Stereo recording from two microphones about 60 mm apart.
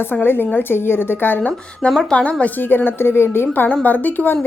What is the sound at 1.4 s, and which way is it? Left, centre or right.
Speech, left.